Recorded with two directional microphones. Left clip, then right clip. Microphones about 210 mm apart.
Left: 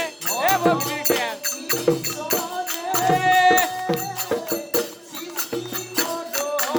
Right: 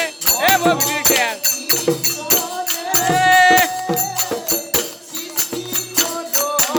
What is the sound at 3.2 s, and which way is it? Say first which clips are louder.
Music: right 6 dB; 50° right (ahead or behind).